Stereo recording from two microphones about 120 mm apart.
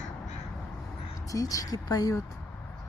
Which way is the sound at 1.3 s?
30° left (ahead or behind).